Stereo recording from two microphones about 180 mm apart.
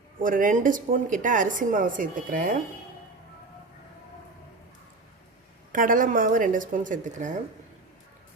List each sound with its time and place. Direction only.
0.2 s a woman's voice: 50° right (ahead or behind)
5.7 s a woman's voice: 50° right (ahead or behind)